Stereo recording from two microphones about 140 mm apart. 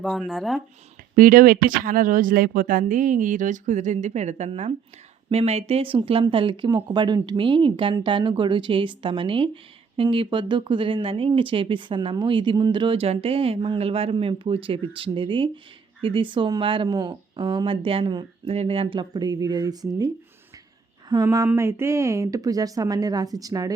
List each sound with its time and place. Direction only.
0.0 s speech: centre (ahead or behind)
1.1 s speech: 80° right; by 18.5 s 30° right (ahead or behind)
18.5 s speech: 45° right (ahead or behind); by 20.1 s 25° right (ahead or behind)
21.1 s speech: 25° right (ahead or behind)